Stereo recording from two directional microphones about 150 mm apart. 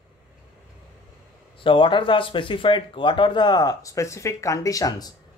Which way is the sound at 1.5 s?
35° left (ahead or behind).